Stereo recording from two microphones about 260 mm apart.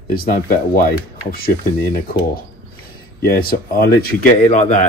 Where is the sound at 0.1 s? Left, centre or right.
Left.